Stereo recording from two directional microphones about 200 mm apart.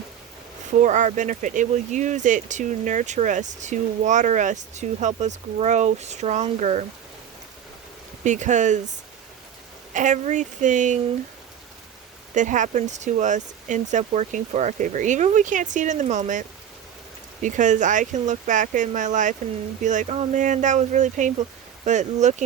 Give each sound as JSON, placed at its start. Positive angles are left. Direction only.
{"t": 0.8, "sound": "speech", "side_deg": -40}
{"t": 8.2, "sound": "speech", "side_deg": -35}
{"t": 12.3, "sound": "speech", "side_deg": -40}